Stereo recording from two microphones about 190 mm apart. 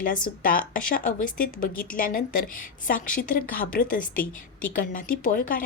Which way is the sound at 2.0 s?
45° left (ahead or behind).